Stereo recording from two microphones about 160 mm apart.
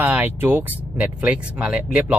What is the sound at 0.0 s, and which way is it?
Speech, 10° right (ahead or behind).